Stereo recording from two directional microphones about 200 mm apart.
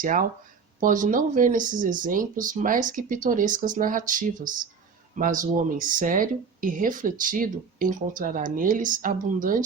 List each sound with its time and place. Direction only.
0.0 s speech: 40° right (ahead or behind)